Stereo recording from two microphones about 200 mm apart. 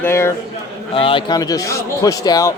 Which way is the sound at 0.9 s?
25° left (ahead or behind).